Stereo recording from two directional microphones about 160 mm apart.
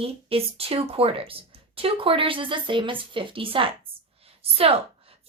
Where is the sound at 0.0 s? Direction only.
35° right (ahead or behind).